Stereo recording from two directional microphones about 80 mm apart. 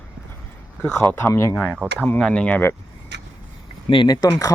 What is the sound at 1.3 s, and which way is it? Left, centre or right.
Speech, left.